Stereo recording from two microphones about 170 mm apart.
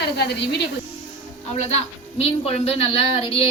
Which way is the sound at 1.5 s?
40° left (ahead or behind).